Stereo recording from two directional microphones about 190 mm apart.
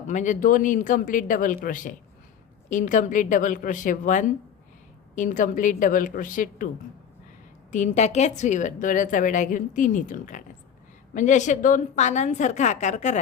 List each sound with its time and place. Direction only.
0.1 s a woman's voice: 40° left (ahead or behind)
7.7 s a woman's voice: 40° left (ahead or behind)